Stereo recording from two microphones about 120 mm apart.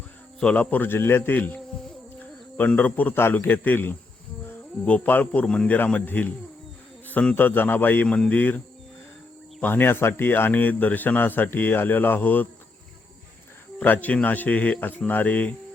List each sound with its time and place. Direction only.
0.3 s a man's voice: 10° left (ahead or behind)
13.7 s speech: 15° left (ahead or behind)